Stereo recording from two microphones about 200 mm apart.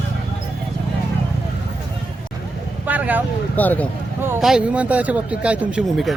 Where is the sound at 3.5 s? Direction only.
10° left (ahead or behind).